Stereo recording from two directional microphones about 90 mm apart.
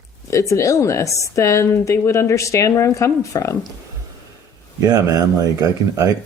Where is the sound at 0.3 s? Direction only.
35° left (ahead or behind).